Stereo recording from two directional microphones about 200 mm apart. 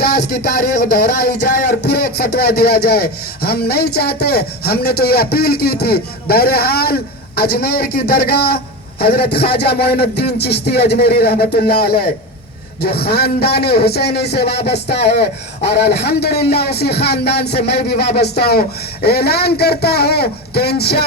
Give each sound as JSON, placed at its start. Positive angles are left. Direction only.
{"t": 0.0, "sound": "speech", "side_deg": 50}